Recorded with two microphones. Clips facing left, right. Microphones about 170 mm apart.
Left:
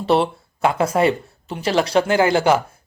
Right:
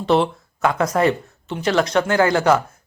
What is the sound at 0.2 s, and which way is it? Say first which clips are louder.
Speech: even; 30° left (ahead or behind).